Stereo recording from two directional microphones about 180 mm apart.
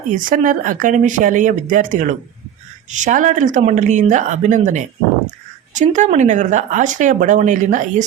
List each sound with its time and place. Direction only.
0.2 s speech: 50° right (ahead or behind)